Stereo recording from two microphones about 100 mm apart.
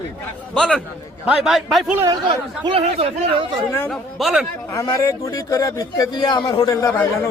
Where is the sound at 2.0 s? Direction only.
50° right (ahead or behind).